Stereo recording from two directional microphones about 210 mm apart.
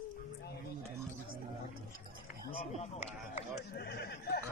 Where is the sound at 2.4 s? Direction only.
30° left (ahead or behind).